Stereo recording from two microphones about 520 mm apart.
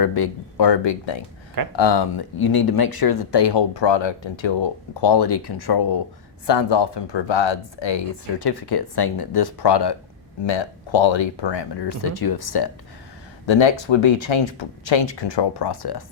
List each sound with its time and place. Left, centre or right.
0.0 s speech: left
13.4 s speech: left